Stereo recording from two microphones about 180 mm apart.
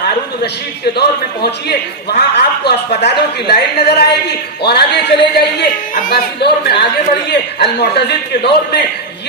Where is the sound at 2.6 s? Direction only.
65° left (ahead or behind).